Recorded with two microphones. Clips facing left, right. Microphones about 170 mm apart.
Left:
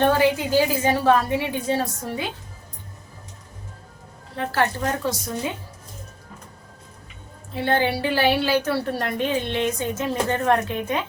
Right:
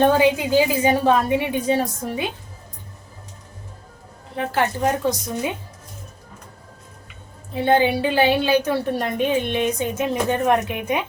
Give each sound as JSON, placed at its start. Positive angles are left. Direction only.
{"t": 0.1, "sound": "a woman's voice", "side_deg": -15}
{"t": 4.4, "sound": "a woman's voice", "side_deg": -15}
{"t": 7.5, "sound": "a woman's voice", "side_deg": -15}